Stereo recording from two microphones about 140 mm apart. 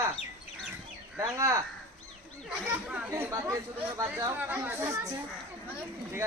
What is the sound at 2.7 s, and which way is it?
Speech, 10° right (ahead or behind).